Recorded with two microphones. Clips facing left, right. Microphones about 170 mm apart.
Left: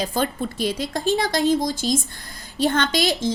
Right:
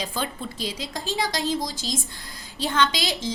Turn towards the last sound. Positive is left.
turn(degrees=50)  # may be behind; listen again after turning